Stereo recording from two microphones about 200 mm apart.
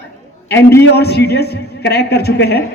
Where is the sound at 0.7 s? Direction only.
55° left (ahead or behind).